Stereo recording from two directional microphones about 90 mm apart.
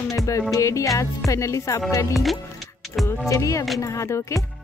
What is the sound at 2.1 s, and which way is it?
Speech, centre (ahead or behind).